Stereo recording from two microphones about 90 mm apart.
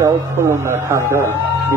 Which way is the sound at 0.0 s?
30° right (ahead or behind).